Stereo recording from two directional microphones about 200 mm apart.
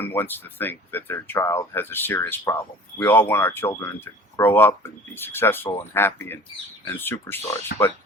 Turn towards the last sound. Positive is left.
turn(degrees=50)  # may be behind; listen again after turning